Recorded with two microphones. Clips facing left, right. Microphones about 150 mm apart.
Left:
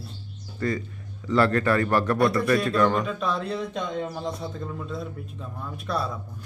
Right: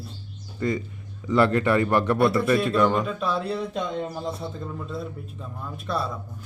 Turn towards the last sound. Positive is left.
turn(degrees=0)  # may be behind; listen again after turning